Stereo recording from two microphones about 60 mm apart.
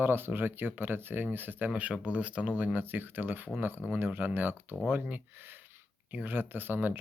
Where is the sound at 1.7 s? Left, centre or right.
Right.